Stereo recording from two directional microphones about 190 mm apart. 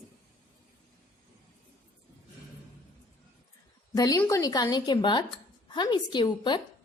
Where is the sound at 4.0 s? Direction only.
20° left (ahead or behind).